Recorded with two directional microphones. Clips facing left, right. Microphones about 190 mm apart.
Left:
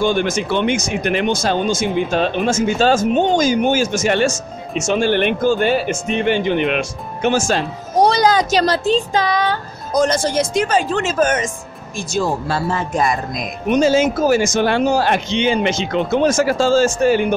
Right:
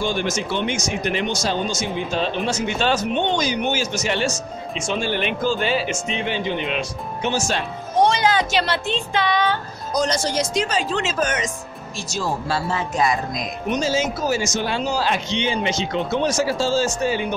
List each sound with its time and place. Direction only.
0.0 s speech: 55° left (ahead or behind)